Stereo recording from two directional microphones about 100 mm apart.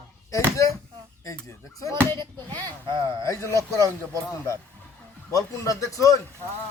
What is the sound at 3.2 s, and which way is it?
Speech, 30° left (ahead or behind).